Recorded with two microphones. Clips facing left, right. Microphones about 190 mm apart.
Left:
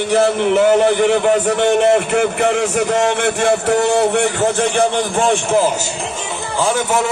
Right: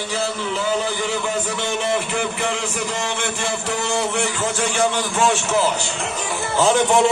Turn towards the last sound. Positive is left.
turn(degrees=5)  # may be behind; listen again after turning